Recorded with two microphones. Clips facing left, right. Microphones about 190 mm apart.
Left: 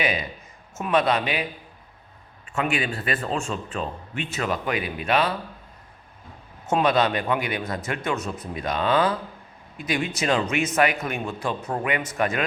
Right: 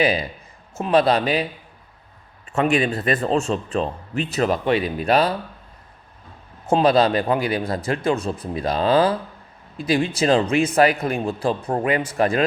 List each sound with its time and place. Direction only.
0.0 s a man's voice: 35° right (ahead or behind)
2.5 s a man's voice: 40° right (ahead or behind)
6.7 s a man's voice: 35° right (ahead or behind)